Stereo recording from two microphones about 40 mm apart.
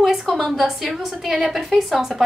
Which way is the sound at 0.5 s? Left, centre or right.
Centre.